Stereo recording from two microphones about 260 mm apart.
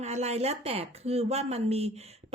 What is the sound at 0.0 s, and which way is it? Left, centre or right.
Speech, right.